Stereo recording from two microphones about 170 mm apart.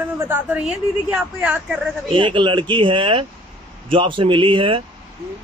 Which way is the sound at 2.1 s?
30° right (ahead or behind).